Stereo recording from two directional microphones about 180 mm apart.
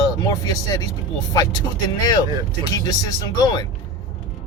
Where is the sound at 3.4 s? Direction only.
25° left (ahead or behind).